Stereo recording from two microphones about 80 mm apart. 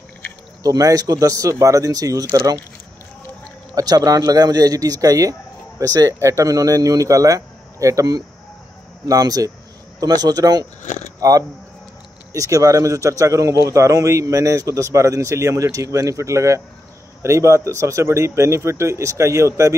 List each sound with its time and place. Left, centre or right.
0.7 s speech: right
3.7 s a man's voice: right